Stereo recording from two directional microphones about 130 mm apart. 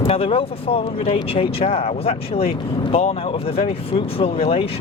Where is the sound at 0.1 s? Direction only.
45° left (ahead or behind).